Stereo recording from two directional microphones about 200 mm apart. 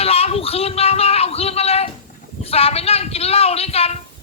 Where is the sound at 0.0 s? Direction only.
30° left (ahead or behind).